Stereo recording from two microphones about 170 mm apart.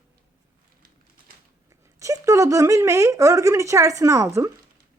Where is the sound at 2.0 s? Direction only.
20° right (ahead or behind).